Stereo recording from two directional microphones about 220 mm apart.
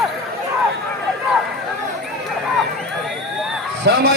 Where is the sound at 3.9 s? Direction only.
50° right (ahead or behind).